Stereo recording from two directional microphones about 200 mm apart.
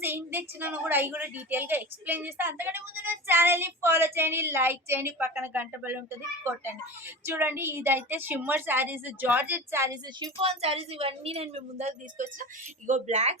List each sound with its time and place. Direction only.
0.0 s a woman's voice: 10° right (ahead or behind)
10.4 s a woman's voice: 30° right (ahead or behind)